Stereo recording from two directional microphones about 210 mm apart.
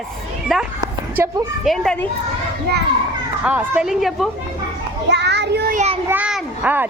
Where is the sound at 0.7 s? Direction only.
20° right (ahead or behind).